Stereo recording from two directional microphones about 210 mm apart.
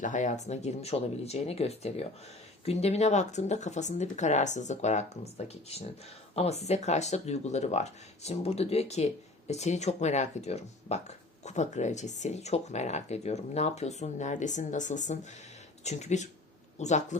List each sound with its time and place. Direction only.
0.0 s speech: 35° left (ahead or behind)